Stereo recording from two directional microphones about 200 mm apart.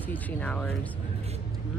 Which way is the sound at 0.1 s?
5° left (ahead or behind).